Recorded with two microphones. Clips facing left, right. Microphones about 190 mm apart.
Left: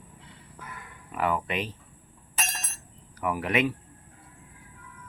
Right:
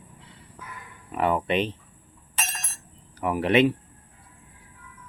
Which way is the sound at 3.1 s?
25° right (ahead or behind).